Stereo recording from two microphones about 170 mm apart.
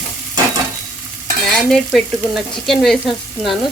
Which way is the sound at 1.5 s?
5° left (ahead or behind).